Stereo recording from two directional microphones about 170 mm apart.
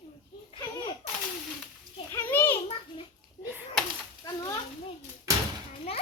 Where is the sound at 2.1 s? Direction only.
15° left (ahead or behind).